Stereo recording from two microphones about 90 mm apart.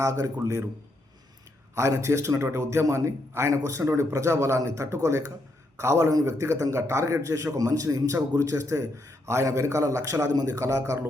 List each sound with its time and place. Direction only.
0.0 s a man's voice: 35° right (ahead or behind)
1.7 s a man's voice: 35° right (ahead or behind)